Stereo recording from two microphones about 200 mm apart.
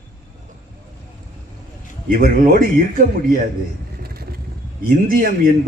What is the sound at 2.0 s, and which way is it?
Speech, 45° right (ahead or behind).